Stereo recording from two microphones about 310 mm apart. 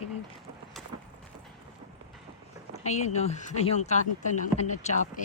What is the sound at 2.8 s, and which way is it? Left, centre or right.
Speech, left.